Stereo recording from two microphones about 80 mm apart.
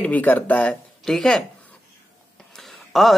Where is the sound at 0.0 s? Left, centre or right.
Left.